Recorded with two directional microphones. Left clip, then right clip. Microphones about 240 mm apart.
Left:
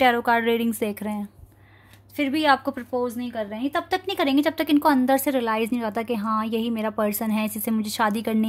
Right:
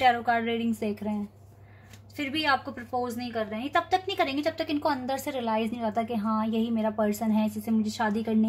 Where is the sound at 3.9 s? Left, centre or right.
Left.